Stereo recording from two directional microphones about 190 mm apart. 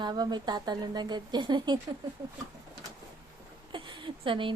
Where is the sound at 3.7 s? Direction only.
25° right (ahead or behind).